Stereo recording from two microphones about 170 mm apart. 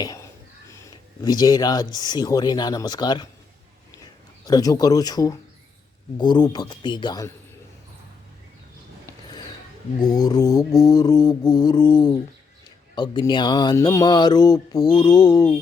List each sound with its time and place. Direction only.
0.7 s a sound: 20° left (ahead or behind)
2.0 s speech: 25° left (ahead or behind)
4.4 s speech: 20° left (ahead or behind)
10.0 s speech: 25° left (ahead or behind)